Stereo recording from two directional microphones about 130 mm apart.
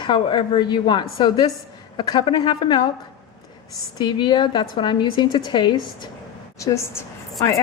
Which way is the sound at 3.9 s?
35° left (ahead or behind).